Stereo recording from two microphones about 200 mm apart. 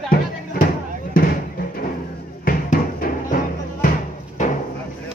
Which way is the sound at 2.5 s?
45° left (ahead or behind).